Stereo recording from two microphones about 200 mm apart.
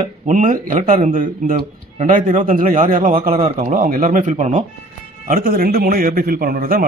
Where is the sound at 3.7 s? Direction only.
45° right (ahead or behind).